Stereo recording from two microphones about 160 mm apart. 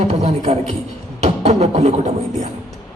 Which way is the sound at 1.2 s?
40° right (ahead or behind).